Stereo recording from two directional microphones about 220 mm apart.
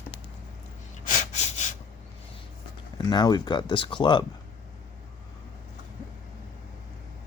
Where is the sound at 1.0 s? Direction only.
35° left (ahead or behind).